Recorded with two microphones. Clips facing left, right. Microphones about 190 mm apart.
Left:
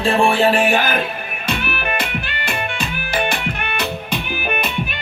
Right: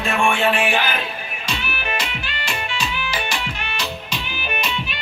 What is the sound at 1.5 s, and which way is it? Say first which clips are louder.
Music: left 5 dB; 55° left (ahead or behind).